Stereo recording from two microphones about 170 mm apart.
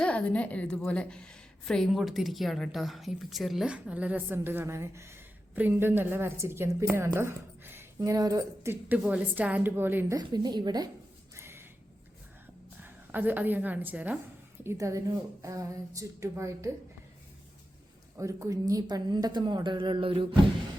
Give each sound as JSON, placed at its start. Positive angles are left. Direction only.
{"t": 0.0, "sound": "a woman's voice", "side_deg": 5}
{"t": 10.2, "sound": "a woman's voice", "side_deg": -25}
{"t": 11.3, "sound": "a sound", "side_deg": -15}
{"t": 12.8, "sound": "a woman's voice", "side_deg": -10}
{"t": 18.2, "sound": "a woman's voice", "side_deg": -20}